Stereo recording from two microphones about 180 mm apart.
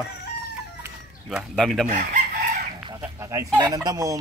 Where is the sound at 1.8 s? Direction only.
45° right (ahead or behind).